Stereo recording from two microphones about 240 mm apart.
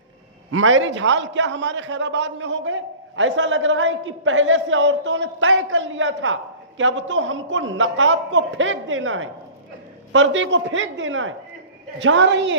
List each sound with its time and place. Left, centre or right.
0.5 s a man's voice: right